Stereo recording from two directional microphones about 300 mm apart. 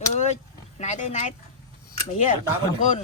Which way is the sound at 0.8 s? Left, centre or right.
Left.